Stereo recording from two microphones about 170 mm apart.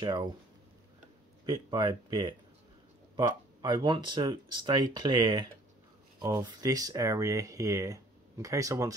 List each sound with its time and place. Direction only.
0.0 s speech: 25° right (ahead or behind)
1.4 s speech: 25° right (ahead or behind)